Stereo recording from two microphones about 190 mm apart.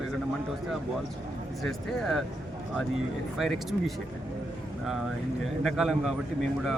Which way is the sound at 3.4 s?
Centre (ahead or behind).